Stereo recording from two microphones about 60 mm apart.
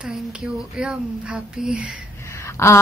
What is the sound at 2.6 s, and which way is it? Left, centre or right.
Speech, left.